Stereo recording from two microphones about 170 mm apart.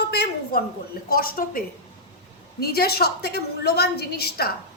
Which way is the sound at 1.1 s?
60° left (ahead or behind).